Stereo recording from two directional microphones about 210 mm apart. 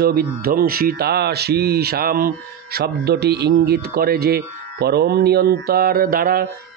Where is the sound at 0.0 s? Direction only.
45° right (ahead or behind).